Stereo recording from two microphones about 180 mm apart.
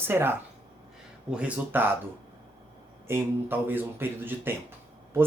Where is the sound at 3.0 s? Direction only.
10° right (ahead or behind).